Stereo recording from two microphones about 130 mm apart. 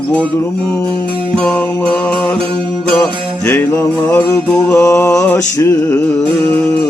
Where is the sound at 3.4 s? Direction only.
15° left (ahead or behind).